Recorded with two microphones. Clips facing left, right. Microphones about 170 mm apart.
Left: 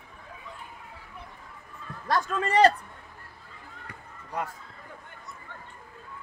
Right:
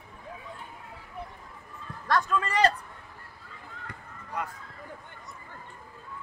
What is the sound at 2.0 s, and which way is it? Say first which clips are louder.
Speech: even; 30° left (ahead or behind).